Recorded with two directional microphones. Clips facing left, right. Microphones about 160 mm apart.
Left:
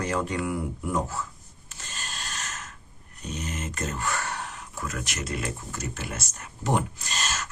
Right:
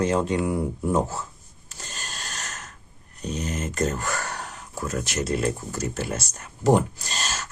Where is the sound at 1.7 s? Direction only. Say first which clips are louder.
Right 1 dB; 40° right (ahead or behind).